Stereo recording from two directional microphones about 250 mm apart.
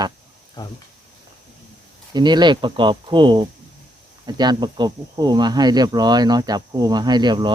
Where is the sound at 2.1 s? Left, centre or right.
Centre.